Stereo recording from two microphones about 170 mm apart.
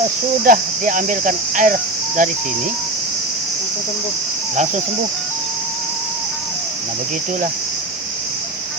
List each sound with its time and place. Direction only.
0.4 s speech: 55° right (ahead or behind)